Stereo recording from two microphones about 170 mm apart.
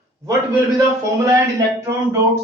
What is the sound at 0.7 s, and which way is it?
Speech, 15° right (ahead or behind).